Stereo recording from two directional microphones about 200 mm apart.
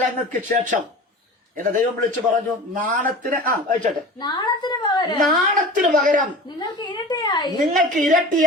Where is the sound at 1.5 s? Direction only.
40° right (ahead or behind).